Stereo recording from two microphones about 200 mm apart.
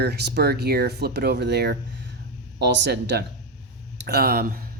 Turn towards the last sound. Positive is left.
turn(degrees=-45)  # may be behind; listen again after turning